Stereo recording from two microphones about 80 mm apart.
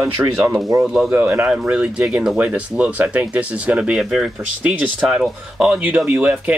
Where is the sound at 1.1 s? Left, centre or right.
Centre.